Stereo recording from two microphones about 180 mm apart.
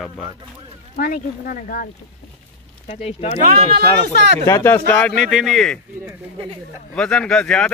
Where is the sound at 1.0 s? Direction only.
50° left (ahead or behind).